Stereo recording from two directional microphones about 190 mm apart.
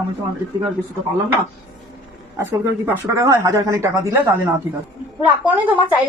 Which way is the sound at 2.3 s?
15° right (ahead or behind).